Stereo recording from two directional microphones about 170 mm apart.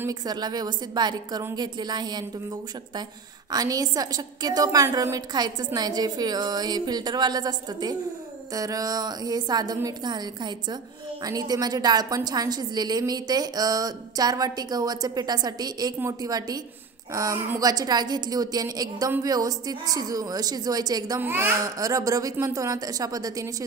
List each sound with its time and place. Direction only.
0.0 s a woman's voice: 25° right (ahead or behind)
3.5 s a woman's voice: 20° right (ahead or behind)